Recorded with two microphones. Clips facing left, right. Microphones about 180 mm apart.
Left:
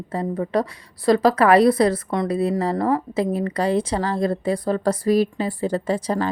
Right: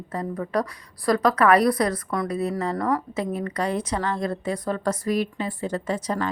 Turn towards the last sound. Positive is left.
turn(degrees=30)  # may be behind; listen again after turning